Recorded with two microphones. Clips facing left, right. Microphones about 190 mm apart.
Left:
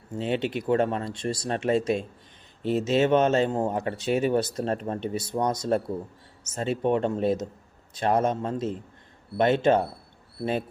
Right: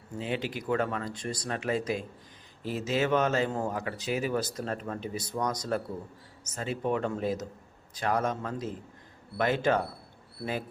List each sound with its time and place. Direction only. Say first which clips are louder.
0.2 s speech: left 6 dB; 25° left (ahead or behind)